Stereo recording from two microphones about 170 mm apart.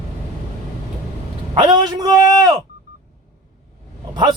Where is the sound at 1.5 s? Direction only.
25° right (ahead or behind).